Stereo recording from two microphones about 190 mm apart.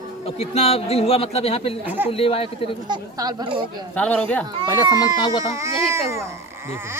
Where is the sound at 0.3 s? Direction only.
30° left (ahead or behind).